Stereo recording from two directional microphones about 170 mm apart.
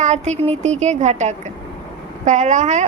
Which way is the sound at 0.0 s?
45° right (ahead or behind).